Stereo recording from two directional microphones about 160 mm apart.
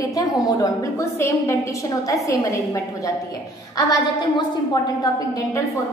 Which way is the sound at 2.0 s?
20° left (ahead or behind).